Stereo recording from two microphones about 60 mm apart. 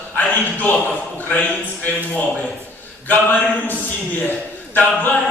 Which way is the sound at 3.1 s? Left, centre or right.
Left.